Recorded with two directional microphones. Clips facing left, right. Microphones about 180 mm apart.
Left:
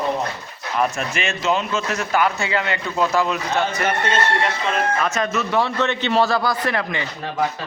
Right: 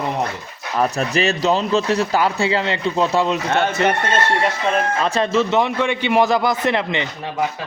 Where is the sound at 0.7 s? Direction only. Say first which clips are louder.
Right 3 dB; 35° right (ahead or behind).